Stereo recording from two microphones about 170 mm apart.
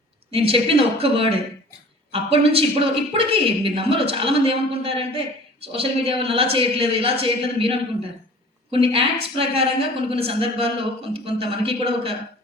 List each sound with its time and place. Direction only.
0.3 s a woman's voice: 35° right (ahead or behind)